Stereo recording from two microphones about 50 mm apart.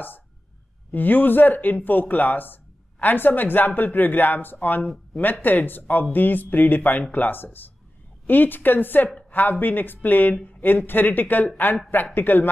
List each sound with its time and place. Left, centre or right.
0.9 s speech: left